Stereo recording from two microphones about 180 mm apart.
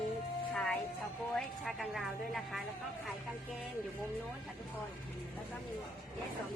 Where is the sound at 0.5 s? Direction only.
5° left (ahead or behind).